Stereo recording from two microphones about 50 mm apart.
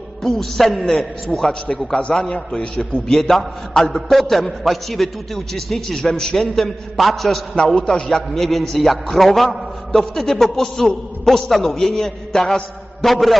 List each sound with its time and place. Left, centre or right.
0.2 s a man's voice: centre
2.1 s a man's voice: centre
7.5 s a man's voice: centre
13.1 s a man's voice: centre